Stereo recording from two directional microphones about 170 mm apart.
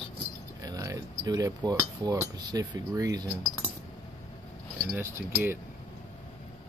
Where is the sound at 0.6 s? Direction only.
20° right (ahead or behind).